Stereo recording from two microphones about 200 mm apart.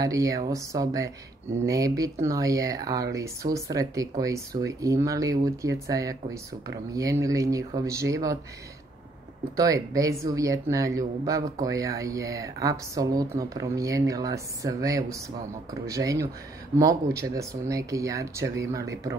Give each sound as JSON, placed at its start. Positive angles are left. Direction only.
{"t": 0.0, "sound": "speech", "side_deg": -15}
{"t": 9.6, "sound": "speech", "side_deg": -15}